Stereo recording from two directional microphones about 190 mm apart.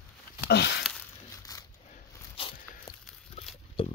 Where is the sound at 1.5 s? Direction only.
20° left (ahead or behind).